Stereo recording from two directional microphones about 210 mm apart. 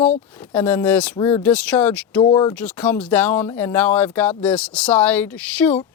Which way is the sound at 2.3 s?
20° left (ahead or behind).